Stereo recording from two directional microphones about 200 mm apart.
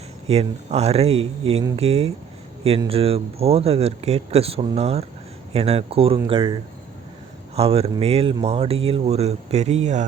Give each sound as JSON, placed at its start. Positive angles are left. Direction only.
{"t": 0.3, "sound": "speech", "side_deg": -30}